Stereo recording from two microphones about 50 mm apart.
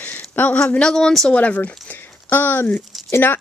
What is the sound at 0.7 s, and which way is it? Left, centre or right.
Speech, centre.